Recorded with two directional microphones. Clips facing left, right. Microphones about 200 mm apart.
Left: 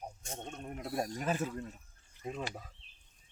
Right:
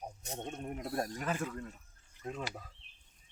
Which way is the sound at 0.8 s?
5° left (ahead or behind).